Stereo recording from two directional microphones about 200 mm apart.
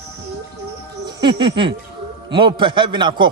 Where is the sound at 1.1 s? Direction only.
20° right (ahead or behind).